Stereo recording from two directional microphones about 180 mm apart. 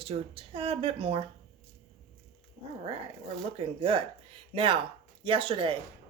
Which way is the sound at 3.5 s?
30° right (ahead or behind).